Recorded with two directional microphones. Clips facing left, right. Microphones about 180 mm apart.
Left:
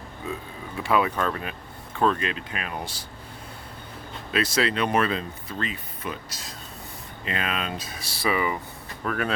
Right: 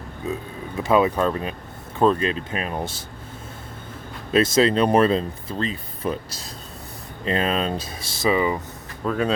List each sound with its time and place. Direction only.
0.8 s speech: 20° right (ahead or behind)
4.3 s speech: 30° right (ahead or behind)
7.3 s speech: 35° right (ahead or behind)